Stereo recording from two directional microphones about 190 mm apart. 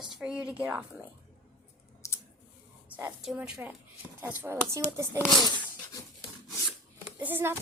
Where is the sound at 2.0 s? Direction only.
15° left (ahead or behind).